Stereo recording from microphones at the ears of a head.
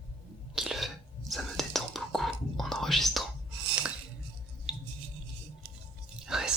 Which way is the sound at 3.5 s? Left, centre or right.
Right.